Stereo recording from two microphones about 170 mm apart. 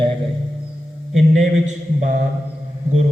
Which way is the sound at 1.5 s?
45° right (ahead or behind).